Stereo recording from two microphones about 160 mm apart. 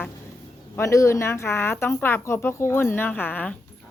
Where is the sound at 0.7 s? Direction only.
20° left (ahead or behind).